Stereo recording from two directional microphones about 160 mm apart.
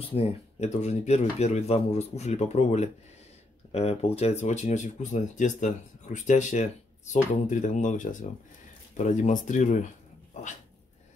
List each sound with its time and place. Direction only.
0.0 s speech: 40° left (ahead or behind)